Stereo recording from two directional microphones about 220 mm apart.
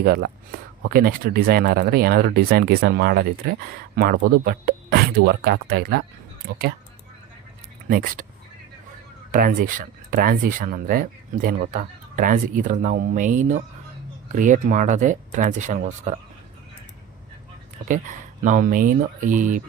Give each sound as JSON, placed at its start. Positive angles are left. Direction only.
{"t": 0.0, "sound": "speech", "side_deg": -40}
{"t": 7.9, "sound": "speech", "side_deg": -40}
{"t": 9.3, "sound": "speech", "side_deg": -40}
{"t": 18.4, "sound": "speech", "side_deg": -40}